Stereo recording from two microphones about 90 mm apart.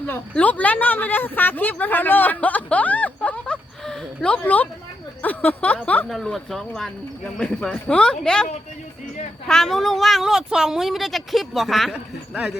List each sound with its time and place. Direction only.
0.0 s speech: 15° left (ahead or behind)
6.1 s speech: centre (ahead or behind)
9.5 s speech: 5° left (ahead or behind)